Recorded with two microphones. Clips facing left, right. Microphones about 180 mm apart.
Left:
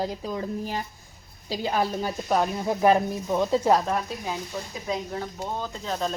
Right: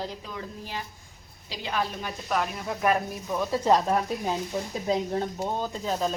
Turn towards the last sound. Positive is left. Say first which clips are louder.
# right 1 dB
turn(degrees=-10)  # may be behind; listen again after turning